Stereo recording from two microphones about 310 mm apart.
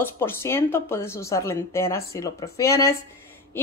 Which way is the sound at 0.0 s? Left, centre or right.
Centre.